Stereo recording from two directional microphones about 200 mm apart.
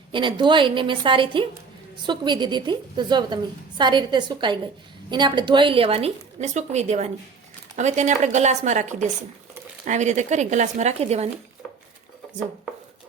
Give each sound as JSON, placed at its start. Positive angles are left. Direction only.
{"t": 0.1, "sound": "a woman's voice", "side_deg": -25}